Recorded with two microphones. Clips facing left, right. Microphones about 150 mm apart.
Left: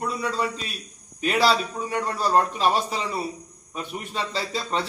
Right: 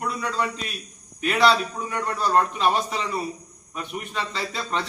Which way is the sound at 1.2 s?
35° left (ahead or behind).